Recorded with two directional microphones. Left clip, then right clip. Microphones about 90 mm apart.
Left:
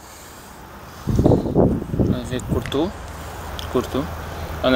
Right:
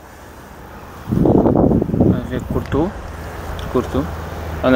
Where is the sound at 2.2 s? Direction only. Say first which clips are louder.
Right 2 dB; 20° left (ahead or behind).